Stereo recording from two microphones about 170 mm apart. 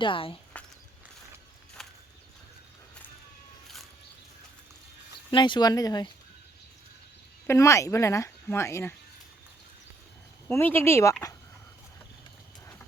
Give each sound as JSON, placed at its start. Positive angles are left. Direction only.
{"t": 0.0, "sound": "speech", "side_deg": 30}
{"t": 0.5, "sound": "walk", "side_deg": 10}
{"t": 1.8, "sound": "horse", "side_deg": 0}
{"t": 5.3, "sound": "speech", "side_deg": 25}
{"t": 7.4, "sound": "speech", "side_deg": 15}
{"t": 10.5, "sound": "speech", "side_deg": 15}